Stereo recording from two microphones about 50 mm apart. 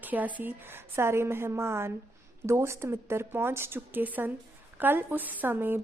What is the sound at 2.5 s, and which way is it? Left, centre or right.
A woman's voice, right.